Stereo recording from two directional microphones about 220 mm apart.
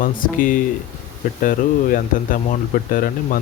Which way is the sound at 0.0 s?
40° left (ahead or behind).